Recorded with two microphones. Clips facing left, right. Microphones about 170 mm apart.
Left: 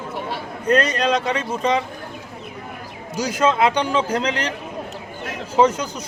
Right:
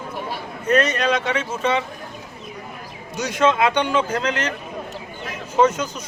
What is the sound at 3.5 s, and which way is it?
Speech, 30° left (ahead or behind).